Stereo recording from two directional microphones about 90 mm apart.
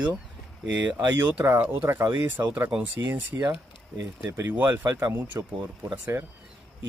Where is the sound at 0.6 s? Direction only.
15° right (ahead or behind); by 5.4 s 35° right (ahead or behind).